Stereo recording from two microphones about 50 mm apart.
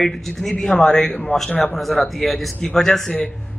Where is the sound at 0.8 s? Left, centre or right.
Centre.